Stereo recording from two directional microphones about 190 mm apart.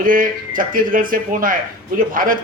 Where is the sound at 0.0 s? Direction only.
45° right (ahead or behind).